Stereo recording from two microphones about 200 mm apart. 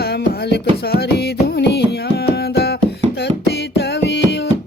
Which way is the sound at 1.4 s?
55° left (ahead or behind).